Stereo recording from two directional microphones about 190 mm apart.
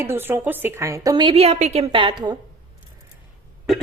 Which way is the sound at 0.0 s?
10° right (ahead or behind).